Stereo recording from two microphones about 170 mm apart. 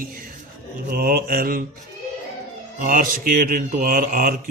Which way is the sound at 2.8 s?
55° right (ahead or behind).